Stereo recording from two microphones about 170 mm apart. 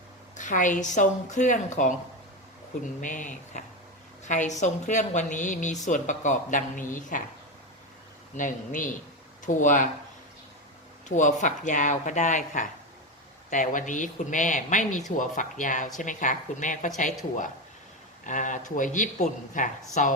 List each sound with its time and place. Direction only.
0.3 s speech: 50° left (ahead or behind)
3.0 s speech: 50° left (ahead or behind)
8.4 s speech: 50° left (ahead or behind)
11.1 s speech: 45° left (ahead or behind)
18.3 s speech: 50° left (ahead or behind)